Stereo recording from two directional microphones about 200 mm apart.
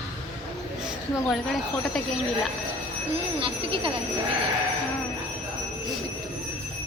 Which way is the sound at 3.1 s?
25° right (ahead or behind).